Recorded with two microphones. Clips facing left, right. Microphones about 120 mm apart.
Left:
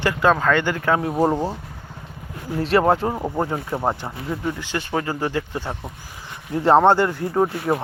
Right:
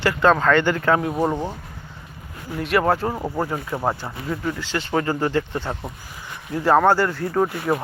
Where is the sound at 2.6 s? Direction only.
30° left (ahead or behind); by 5.8 s 10° left (ahead or behind).